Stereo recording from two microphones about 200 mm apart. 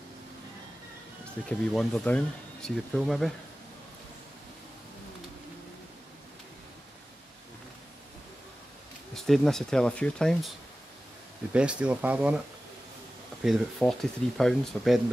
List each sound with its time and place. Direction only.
1.6 s speech: 5° left (ahead or behind)
9.1 s speech: centre (ahead or behind)
11.5 s speech: 5° right (ahead or behind)
13.4 s speech: centre (ahead or behind)